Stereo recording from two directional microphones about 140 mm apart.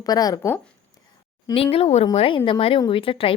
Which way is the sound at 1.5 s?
40° left (ahead or behind).